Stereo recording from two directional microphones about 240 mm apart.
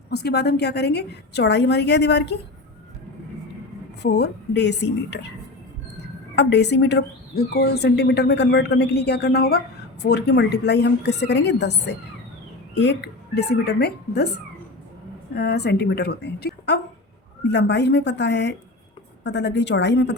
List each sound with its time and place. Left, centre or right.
0.1 s speech: left
4.0 s speech: left
6.3 s speech: left